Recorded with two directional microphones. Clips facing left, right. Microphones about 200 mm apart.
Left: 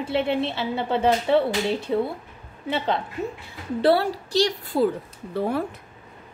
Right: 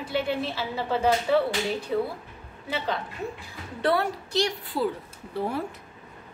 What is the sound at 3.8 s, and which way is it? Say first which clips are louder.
A woman's voice: left 5 dB; 30° left (ahead or behind).